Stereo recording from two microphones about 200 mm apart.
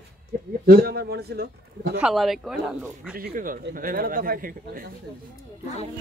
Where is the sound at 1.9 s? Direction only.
Centre (ahead or behind).